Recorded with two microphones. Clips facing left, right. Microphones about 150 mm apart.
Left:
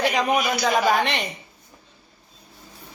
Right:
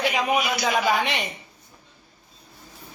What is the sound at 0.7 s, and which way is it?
Speech, 40° left (ahead or behind).